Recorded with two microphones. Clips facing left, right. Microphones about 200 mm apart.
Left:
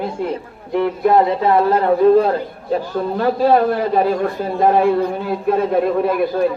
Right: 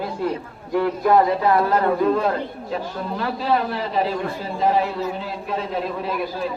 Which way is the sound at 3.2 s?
50° left (ahead or behind).